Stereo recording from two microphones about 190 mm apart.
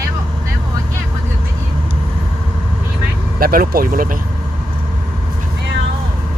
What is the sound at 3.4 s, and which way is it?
Speech, 50° right (ahead or behind).